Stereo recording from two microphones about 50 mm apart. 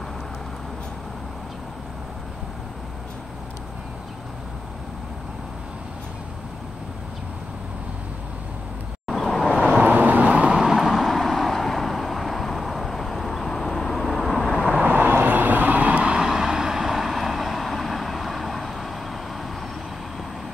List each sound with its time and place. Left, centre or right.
9.0 s vehicle: centre
9.5 s vehicle: centre
9.8 s vehicle: right
10.5 s vehicle: centre
14.8 s vehicle: right
16.2 s vehicle: centre